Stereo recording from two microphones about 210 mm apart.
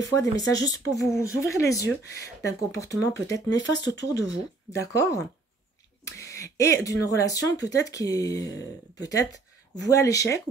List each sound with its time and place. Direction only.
0.0 s speech: 15° left (ahead or behind)